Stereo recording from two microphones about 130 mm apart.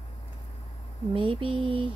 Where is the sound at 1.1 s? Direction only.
40° right (ahead or behind).